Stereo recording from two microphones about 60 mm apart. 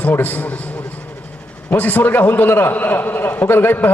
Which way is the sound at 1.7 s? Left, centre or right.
Left.